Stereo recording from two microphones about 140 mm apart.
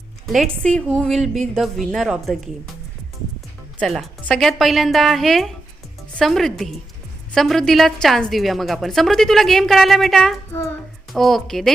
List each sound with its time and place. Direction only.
0.3 s a woman's voice: 5° left (ahead or behind)
3.8 s a woman's voice: 5° left (ahead or behind)
10.5 s a child's voice: 15° left (ahead or behind)
11.1 s a woman's voice: centre (ahead or behind)